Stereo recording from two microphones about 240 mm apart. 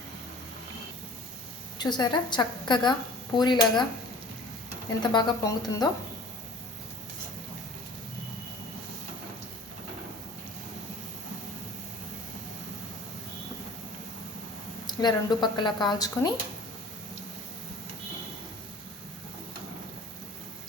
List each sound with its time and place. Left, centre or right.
1.8 s speech: centre
4.9 s speech: centre
14.8 s speech: centre